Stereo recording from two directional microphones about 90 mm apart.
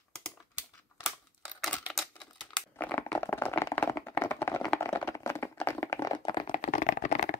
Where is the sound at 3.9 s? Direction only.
35° left (ahead or behind).